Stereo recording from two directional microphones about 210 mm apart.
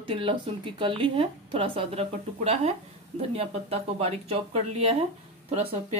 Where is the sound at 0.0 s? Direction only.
25° right (ahead or behind).